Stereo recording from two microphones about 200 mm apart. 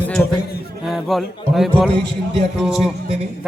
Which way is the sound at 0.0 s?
5° left (ahead or behind).